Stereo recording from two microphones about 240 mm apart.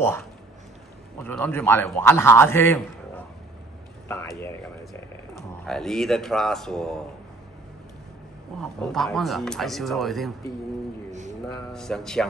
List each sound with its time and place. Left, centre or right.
0.0 s a man's voice: centre
4.1 s a man's voice: centre
8.5 s speech: centre
11.1 s a sound: right
11.7 s speech: centre